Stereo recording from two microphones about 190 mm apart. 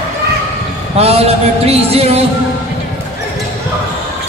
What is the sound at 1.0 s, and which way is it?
A man's voice, 30° right (ahead or behind).